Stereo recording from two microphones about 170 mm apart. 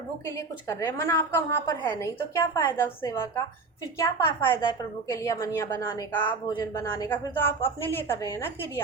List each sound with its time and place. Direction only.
0.3 s a woman's voice: 20° left (ahead or behind)